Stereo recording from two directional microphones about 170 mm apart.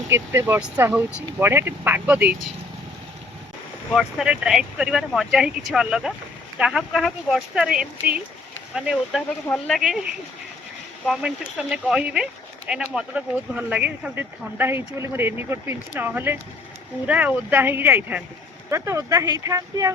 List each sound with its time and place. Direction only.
0.1 s speech: 15° right (ahead or behind)
3.9 s speech: 5° right (ahead or behind)
11.0 s speech: centre (ahead or behind); by 19.9 s 20° right (ahead or behind)